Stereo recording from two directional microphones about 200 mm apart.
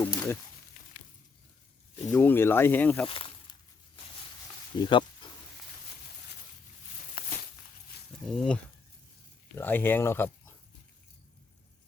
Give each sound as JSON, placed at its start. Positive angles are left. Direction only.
{"t": 0.0, "sound": "a sound", "side_deg": 10}
{"t": 2.1, "sound": "speech", "side_deg": 10}
{"t": 3.1, "sound": "snake", "side_deg": 25}
{"t": 4.8, "sound": "speech", "side_deg": 25}
{"t": 8.3, "sound": "speech", "side_deg": 5}